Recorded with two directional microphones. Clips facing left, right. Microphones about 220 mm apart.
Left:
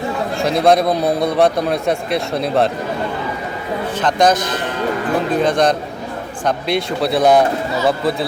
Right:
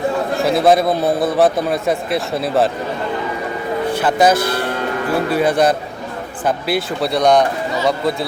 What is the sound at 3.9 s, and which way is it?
A man's voice, 10° right (ahead or behind).